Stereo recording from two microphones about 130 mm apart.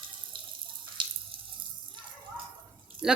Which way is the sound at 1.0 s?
40° right (ahead or behind).